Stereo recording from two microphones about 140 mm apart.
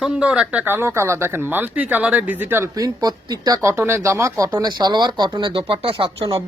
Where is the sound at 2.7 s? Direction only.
25° right (ahead or behind).